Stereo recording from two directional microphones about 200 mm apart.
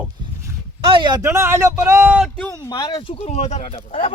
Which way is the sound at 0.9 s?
25° right (ahead or behind).